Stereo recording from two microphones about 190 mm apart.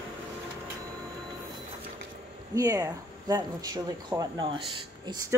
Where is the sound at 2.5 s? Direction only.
15° right (ahead or behind).